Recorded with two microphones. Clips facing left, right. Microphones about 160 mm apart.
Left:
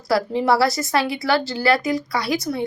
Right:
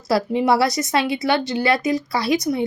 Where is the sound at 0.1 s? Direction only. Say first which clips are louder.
Right 1 dB; 20° right (ahead or behind).